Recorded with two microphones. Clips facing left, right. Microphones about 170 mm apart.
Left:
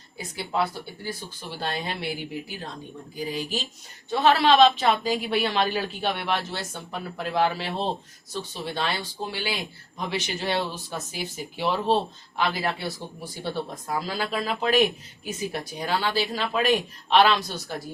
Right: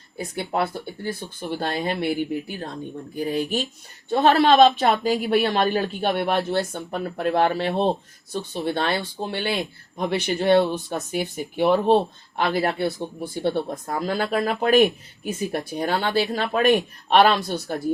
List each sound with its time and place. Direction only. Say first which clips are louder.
0.2 s speech: right 3 dB; 55° right (ahead or behind)